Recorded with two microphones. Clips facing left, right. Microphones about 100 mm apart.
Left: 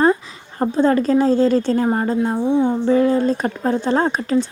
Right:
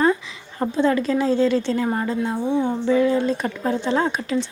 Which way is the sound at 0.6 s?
40° left (ahead or behind).